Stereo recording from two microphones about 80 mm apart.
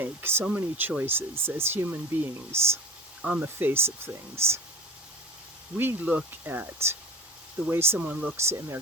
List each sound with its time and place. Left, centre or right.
0.0 s speech: right
3.2 s speech: centre
3.4 s speech: right
5.7 s speech: right
7.9 s speech: centre
8.4 s speech: right